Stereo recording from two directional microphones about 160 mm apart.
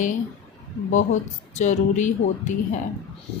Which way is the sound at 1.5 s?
50° left (ahead or behind).